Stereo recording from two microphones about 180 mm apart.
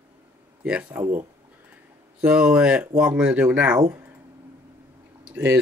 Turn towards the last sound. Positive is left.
turn(degrees=-10)  # may be behind; listen again after turning